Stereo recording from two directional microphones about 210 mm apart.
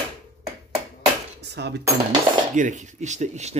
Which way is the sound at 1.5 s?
55° right (ahead or behind).